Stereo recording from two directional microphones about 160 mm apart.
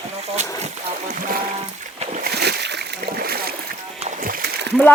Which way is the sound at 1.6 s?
40° right (ahead or behind).